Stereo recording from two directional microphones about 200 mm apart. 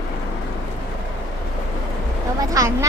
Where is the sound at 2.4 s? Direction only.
15° right (ahead or behind).